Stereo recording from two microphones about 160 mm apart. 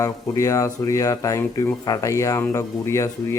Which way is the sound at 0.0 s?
20° left (ahead or behind).